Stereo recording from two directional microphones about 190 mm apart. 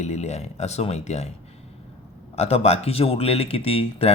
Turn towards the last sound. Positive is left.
turn(degrees=30)  # may be behind; listen again after turning